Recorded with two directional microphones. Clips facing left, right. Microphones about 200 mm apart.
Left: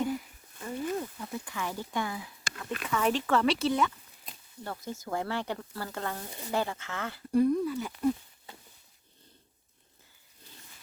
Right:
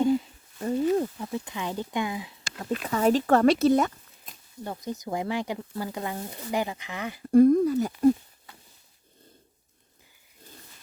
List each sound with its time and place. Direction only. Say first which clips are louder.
0.0 s a sound: right 8 dB; 25° right (ahead or behind)
0.6 s a sound: right 9 dB; 40° right (ahead or behind)
1.2 s speech: right 4 dB; 20° right (ahead or behind)
2.9 s speech: right 6 dB; 40° right (ahead or behind)
4.6 s speech: right 5 dB; 15° right (ahead or behind)
7.3 s speech: right 8 dB; 50° right (ahead or behind)